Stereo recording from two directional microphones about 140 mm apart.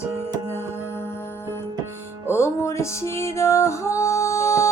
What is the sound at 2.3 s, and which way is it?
Music, 20° left (ahead or behind).